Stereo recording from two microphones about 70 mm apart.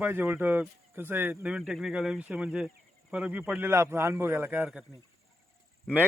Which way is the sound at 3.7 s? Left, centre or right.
Right.